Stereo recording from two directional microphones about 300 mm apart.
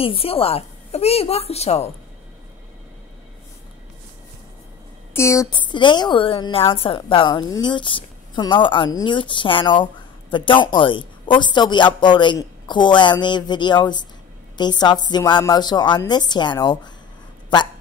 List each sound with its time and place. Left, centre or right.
0.0 s a woman's voice: centre
5.1 s a woman's voice: centre